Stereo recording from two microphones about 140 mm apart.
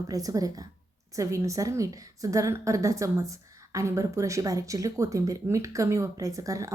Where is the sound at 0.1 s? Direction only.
25° right (ahead or behind).